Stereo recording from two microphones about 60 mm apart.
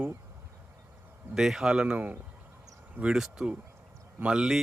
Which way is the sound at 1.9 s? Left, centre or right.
Right.